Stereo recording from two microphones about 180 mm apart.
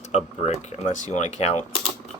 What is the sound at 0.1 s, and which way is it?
Speech, 35° left (ahead or behind).